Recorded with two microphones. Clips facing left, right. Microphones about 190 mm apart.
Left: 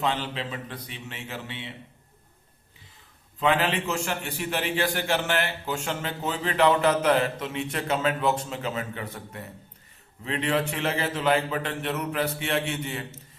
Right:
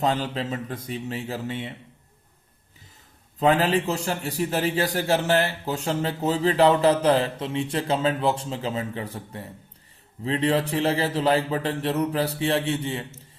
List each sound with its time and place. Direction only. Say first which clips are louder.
0.0 s a man's voice: right 4 dB; 40° right (ahead or behind)
3.3 s a man's voice: right 4 dB; 40° right (ahead or behind)